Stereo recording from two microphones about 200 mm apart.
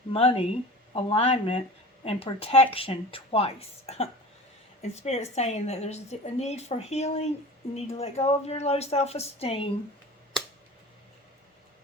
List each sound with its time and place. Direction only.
0.1 s a woman's voice: 30° left (ahead or behind)